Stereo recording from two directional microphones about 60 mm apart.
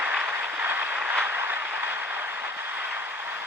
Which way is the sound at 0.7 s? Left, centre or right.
Right.